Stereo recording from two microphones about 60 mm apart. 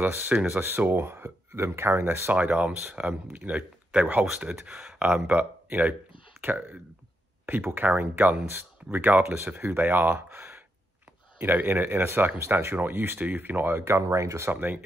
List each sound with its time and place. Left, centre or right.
0.0 s speech: right
2.3 s speech: right
14.0 s speech: right
14.5 s speech: right